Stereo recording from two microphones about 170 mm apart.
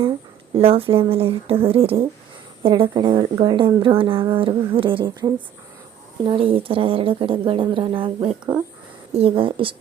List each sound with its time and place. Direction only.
0.5 s a woman's voice: 35° right (ahead or behind)